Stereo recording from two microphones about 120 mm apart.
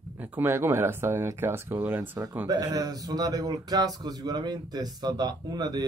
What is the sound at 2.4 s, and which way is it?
Speech, 35° right (ahead or behind).